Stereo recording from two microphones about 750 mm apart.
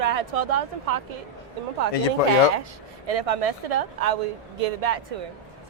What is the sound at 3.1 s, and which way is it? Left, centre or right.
A woman's voice, right.